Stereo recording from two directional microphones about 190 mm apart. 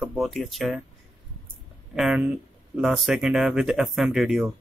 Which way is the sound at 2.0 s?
5° right (ahead or behind).